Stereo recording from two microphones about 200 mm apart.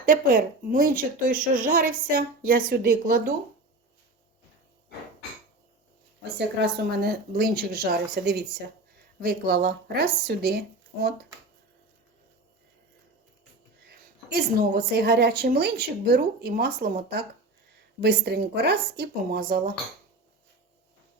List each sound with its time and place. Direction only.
0.0 s a woman's voice: 40° right (ahead or behind)
6.6 s a woman's voice: 50° right (ahead or behind)
13.8 s a woman's voice: 50° right (ahead or behind)